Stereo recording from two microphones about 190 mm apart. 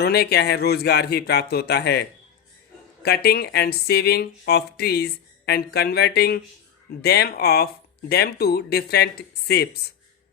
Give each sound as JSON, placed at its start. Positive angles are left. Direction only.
{"t": 0.0, "sound": "speech", "side_deg": 55}